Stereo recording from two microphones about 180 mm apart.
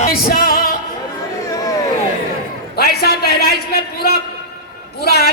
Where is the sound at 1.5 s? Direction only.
20° left (ahead or behind).